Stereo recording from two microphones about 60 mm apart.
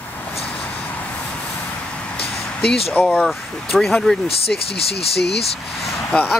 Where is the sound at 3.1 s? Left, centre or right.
Centre.